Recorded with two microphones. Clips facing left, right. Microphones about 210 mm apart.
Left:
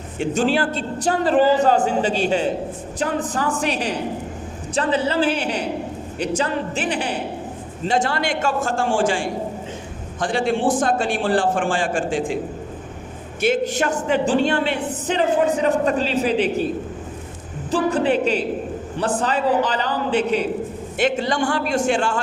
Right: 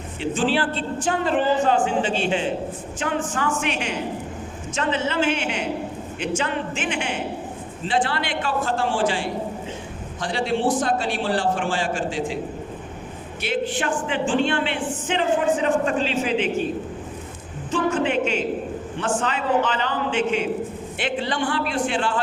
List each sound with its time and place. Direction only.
0.2 s a woman's voice: 45° left (ahead or behind)
13.4 s a woman's voice: 45° left (ahead or behind)
17.7 s a sound: 35° left (ahead or behind)
18.9 s a woman's voice: 35° left (ahead or behind)